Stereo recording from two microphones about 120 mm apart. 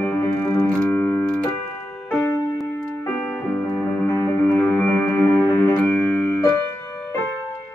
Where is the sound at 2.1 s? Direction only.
15° left (ahead or behind).